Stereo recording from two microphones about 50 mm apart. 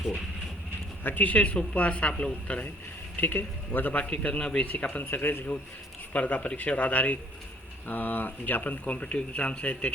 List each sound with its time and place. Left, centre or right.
1.0 s speech: left
3.2 s speech: left
4.1 s speech: left
4.6 s speech: left